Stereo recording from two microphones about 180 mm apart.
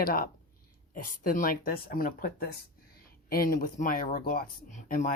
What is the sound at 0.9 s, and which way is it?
Speech, 50° left (ahead or behind).